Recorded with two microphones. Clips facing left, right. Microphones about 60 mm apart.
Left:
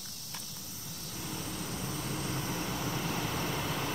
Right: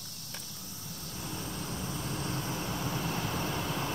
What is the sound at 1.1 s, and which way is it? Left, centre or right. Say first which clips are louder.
Vehicle: even; centre.